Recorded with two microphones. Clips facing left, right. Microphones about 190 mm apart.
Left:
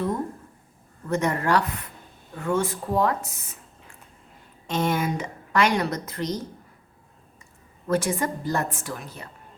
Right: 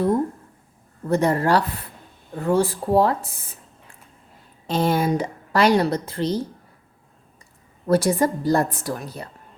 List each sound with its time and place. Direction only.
1.0 s a woman's voice: 35° right (ahead or behind)
4.6 s a woman's voice: 35° right (ahead or behind)
7.9 s a woman's voice: 35° right (ahead or behind)